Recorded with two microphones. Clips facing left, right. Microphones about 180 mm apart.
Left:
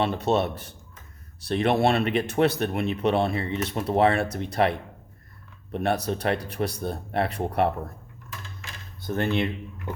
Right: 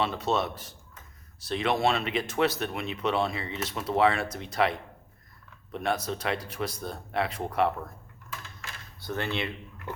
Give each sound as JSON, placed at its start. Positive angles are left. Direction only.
{"t": 0.0, "sound": "speech", "side_deg": 55}
{"t": 5.7, "sound": "speech", "side_deg": 60}
{"t": 9.0, "sound": "speech", "side_deg": 50}